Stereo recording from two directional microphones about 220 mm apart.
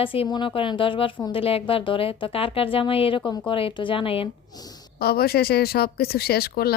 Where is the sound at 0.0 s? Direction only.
25° left (ahead or behind).